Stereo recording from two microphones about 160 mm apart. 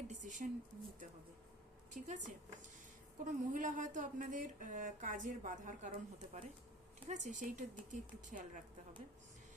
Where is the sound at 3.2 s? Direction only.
55° right (ahead or behind).